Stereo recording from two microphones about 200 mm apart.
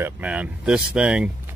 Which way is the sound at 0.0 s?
5° right (ahead or behind).